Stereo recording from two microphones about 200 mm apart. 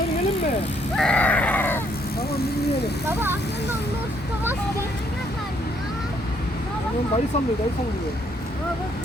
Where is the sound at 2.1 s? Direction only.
50° left (ahead or behind).